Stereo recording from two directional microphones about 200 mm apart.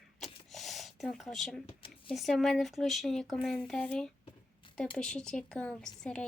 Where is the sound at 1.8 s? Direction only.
25° left (ahead or behind).